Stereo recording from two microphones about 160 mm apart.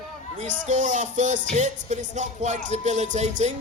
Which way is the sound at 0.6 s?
50° right (ahead or behind).